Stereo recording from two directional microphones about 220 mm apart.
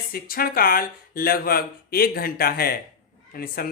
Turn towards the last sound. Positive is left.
turn(degrees=40)  # may be behind; listen again after turning